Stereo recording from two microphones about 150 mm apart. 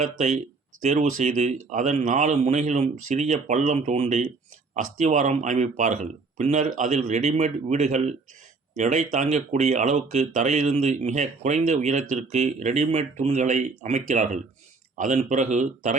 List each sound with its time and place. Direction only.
0.0 s speech: 45° right (ahead or behind)